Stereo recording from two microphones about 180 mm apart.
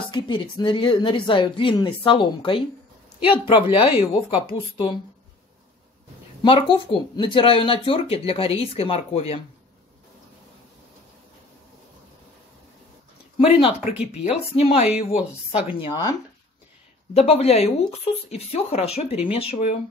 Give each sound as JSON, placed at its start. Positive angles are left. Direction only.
{"t": 0.1, "sound": "speech", "side_deg": 25}
{"t": 6.4, "sound": "speech", "side_deg": 30}
{"t": 13.4, "sound": "speech", "side_deg": 30}